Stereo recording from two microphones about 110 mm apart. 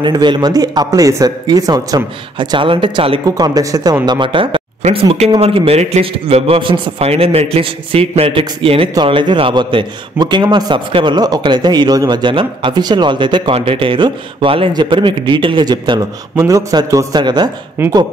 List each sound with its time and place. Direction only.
0.0 s speech: 45° right (ahead or behind)
3.3 s a man's voice: 35° right (ahead or behind)
5.4 s a man's voice: 65° right (ahead or behind)
8.9 s a man's voice: 45° right (ahead or behind)
13.6 s a man's voice: 55° right (ahead or behind)
16.3 s speech: 30° right (ahead or behind)